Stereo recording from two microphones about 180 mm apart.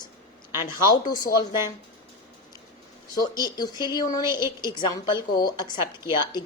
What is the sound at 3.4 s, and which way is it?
A woman's voice, 20° left (ahead or behind).